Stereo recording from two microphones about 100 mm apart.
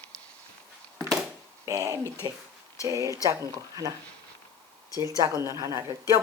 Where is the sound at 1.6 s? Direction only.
35° right (ahead or behind).